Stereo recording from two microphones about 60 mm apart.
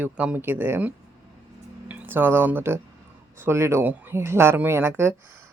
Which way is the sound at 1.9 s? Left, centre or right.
Right.